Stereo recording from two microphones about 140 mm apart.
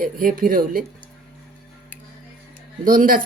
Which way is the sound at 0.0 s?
80° right.